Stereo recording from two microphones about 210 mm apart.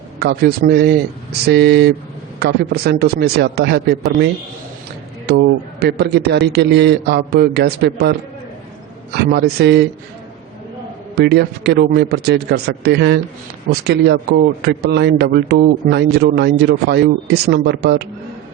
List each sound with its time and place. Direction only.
0.2 s a man's voice: 45° right (ahead or behind)
5.3 s a man's voice: 50° right (ahead or behind)
9.1 s a man's voice: 50° right (ahead or behind)
11.1 s a man's voice: 50° right (ahead or behind)